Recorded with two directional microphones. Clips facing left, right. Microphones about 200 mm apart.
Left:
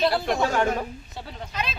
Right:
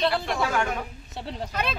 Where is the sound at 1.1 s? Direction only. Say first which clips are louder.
Right 5 dB; 30° right (ahead or behind).